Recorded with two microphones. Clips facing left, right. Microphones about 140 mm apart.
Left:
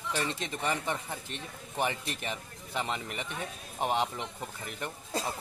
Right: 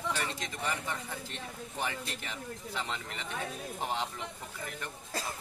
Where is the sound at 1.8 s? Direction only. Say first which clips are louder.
Left 5 dB; 20° left (ahead or behind).